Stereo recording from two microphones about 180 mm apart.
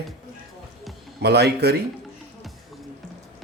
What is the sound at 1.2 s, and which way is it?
Speech, 65° right (ahead or behind).